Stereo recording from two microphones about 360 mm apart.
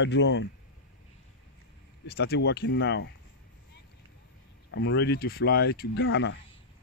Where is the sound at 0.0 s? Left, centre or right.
Left.